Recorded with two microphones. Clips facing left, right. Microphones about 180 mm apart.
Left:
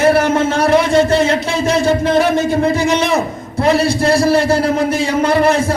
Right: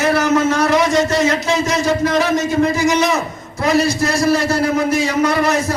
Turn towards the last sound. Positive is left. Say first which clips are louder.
# left 3 dB
turn(degrees=30)  # may be behind; listen again after turning